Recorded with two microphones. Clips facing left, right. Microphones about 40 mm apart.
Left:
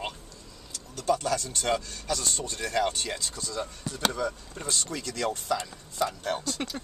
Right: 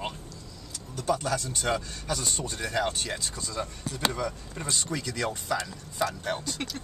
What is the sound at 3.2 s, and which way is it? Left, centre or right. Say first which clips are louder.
Speech: even; centre.